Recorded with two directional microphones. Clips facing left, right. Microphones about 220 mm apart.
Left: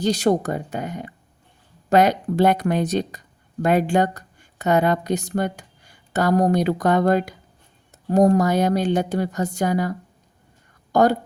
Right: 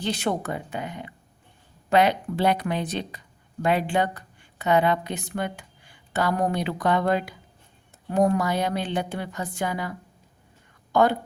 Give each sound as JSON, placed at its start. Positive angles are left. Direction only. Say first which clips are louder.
{"t": 0.0, "sound": "a woman's voice", "louder": "left 7 dB", "side_deg": 40}
{"t": 10.9, "sound": "a woman's voice", "louder": "left 3 dB", "side_deg": 40}